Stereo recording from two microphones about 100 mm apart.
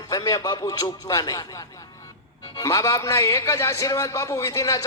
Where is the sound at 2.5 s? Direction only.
35° left (ahead or behind).